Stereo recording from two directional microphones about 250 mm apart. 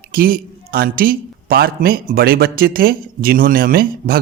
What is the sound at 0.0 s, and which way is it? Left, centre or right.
A man's voice, right.